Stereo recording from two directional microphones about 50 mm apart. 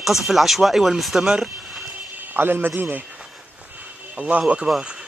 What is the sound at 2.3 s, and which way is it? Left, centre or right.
Speech, right.